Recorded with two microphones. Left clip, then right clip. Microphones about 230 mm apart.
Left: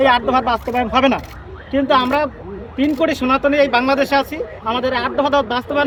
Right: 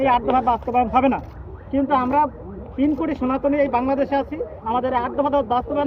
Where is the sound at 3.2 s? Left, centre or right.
Left.